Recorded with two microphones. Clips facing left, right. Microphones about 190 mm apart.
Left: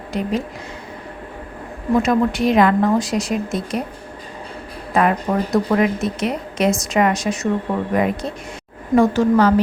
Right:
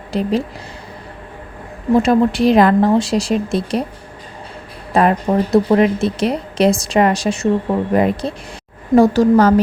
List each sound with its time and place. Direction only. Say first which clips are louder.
0.1 s a woman's voice: right 4 dB; 30° right (ahead or behind)
2.0 s a woman's voice: right 4 dB; 30° right (ahead or behind)
4.9 s a woman's voice: right 3 dB; 30° right (ahead or behind)